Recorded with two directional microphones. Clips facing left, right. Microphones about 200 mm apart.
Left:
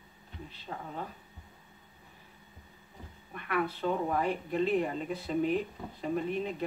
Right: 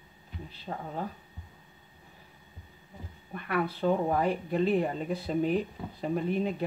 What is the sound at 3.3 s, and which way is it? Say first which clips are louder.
Speech: right 2 dB; 35° right (ahead or behind).